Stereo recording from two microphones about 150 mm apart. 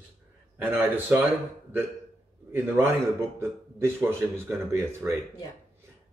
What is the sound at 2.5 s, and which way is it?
A man's voice, 15° right (ahead or behind).